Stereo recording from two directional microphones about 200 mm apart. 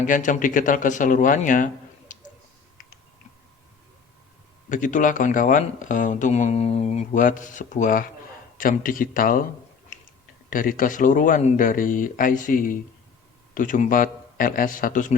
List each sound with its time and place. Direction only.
0.0 s speech: 40° left (ahead or behind)
4.7 s speech: 40° left (ahead or behind)
10.5 s speech: 45° left (ahead or behind)